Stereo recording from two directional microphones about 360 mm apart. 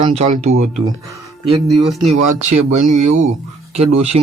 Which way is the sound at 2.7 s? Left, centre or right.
Centre.